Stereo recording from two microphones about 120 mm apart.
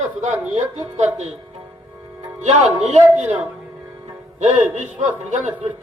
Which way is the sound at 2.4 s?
70° right (ahead or behind).